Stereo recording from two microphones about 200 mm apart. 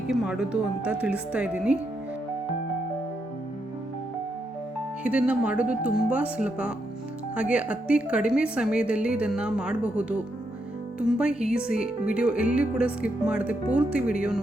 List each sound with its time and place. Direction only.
0.1 s speech: 5° right (ahead or behind)
5.0 s speech: 5° right (ahead or behind)